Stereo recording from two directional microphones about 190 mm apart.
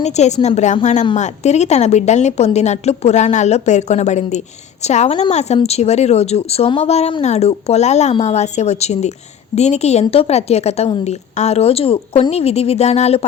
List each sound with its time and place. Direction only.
0.0 s a woman's voice: 35° left (ahead or behind)